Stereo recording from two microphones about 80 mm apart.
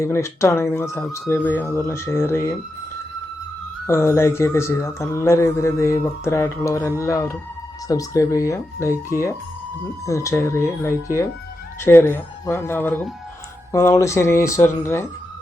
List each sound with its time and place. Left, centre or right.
0.0 s speech: left
3.8 s speech: left
13.7 s speech: left